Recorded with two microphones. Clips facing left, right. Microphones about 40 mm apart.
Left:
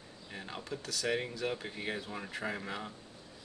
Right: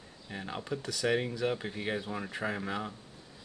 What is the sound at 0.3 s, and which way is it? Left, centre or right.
Speech, centre.